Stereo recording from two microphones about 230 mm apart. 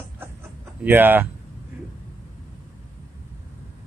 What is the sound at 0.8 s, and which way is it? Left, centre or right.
Speech, centre.